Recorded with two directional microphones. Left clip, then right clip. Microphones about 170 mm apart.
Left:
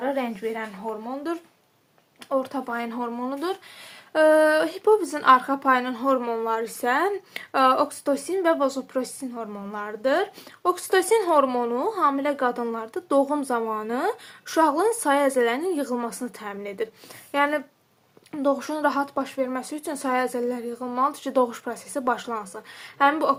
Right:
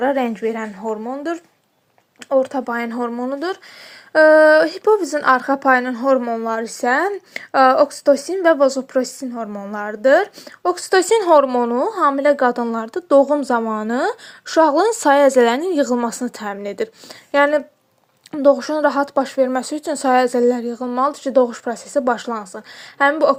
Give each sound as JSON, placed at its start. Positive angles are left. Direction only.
{"t": 0.0, "sound": "a woman's voice", "side_deg": -55}